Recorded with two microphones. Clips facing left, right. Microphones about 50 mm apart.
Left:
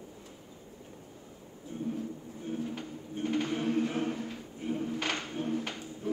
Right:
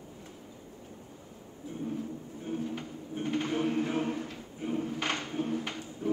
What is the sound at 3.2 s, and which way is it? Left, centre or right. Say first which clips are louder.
Music: even; right.